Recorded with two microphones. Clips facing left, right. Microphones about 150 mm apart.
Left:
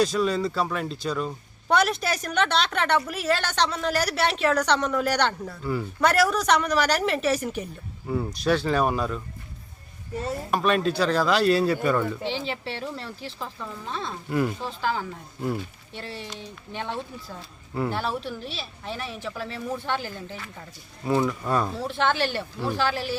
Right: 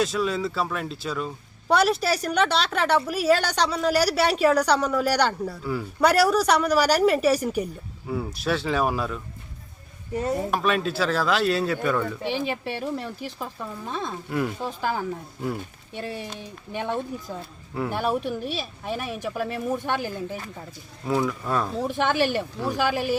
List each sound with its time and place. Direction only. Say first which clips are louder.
0.0 s a woman's voice: left 2 dB; centre (ahead or behind)
10.5 s speech: left 1 dB; centre (ahead or behind)
12.2 s a woman's voice: right 3 dB; 15° right (ahead or behind)
14.3 s speech: left 3 dB; centre (ahead or behind)
14.6 s a woman's voice: right 1 dB; 15° right (ahead or behind)
15.4 s speech: left 2 dB; centre (ahead or behind)
15.9 s a woman's voice: right 7 dB; 15° right (ahead or behind)
17.9 s a woman's voice: right 4 dB; 15° right (ahead or behind)
18.2 s speech: right 5 dB; 50° right (ahead or behind)
18.5 s a woman's voice: right 5 dB; 15° right (ahead or behind)
21.0 s speech: left 1 dB; centre (ahead or behind)
21.8 s a woman's voice: right 2 dB; 15° right (ahead or behind)